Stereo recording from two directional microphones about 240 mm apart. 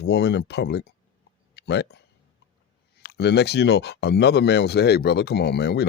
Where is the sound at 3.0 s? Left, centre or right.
Left.